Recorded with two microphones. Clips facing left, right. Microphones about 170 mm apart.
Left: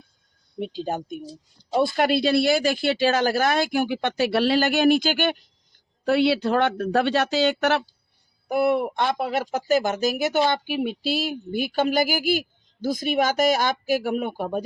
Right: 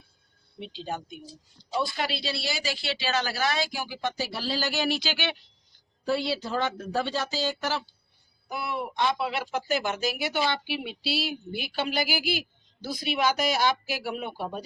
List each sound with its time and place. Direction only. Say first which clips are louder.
0.6 s speech: left 7 dB; 45° left (ahead or behind); by 7.9 s 65° left (ahead or behind)
8.4 s speech: left 12 dB; 55° left (ahead or behind)